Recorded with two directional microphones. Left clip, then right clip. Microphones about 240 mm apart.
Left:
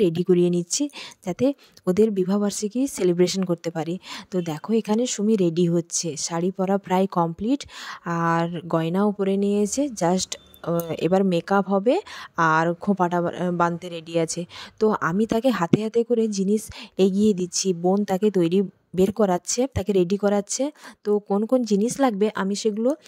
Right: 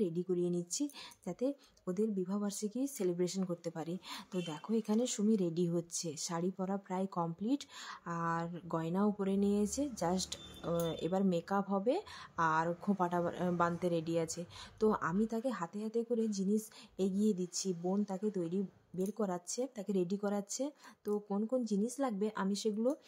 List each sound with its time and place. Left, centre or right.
0.0 s speech: left